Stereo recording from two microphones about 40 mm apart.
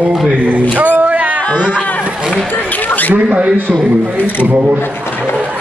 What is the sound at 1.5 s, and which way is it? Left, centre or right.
Speech, right.